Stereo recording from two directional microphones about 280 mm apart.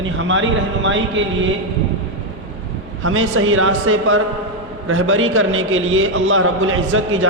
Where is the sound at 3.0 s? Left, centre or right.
Right.